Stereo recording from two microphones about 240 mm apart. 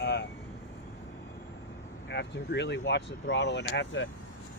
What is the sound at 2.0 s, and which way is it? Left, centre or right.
Speech, left.